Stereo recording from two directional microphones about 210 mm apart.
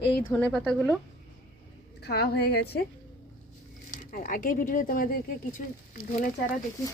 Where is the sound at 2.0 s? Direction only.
50° left (ahead or behind).